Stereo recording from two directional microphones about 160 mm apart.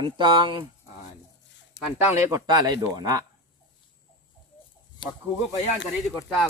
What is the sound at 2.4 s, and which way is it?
Speech, 25° right (ahead or behind).